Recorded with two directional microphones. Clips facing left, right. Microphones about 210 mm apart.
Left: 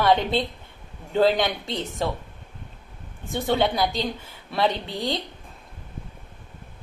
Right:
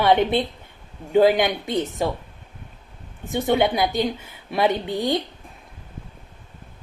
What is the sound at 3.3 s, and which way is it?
A woman's voice, 20° right (ahead or behind).